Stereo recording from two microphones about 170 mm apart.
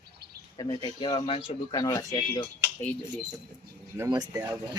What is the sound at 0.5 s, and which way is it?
Speech, 25° left (ahead or behind).